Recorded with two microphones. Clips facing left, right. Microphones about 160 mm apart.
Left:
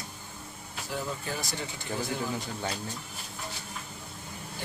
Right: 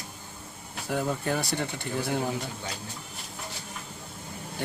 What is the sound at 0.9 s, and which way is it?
Speech, 60° right (ahead or behind).